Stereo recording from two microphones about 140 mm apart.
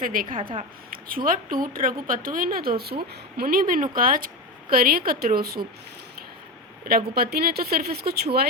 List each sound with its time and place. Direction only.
0.0 s a woman's voice: 85° right
6.8 s speech: 90° right